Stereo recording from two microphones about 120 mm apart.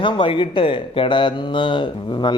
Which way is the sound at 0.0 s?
45° left (ahead or behind).